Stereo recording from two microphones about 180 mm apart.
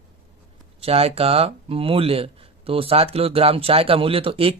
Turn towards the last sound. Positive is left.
turn(degrees=-30)  # may be behind; listen again after turning